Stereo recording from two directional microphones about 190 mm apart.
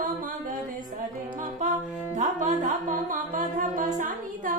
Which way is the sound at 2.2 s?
40° right (ahead or behind).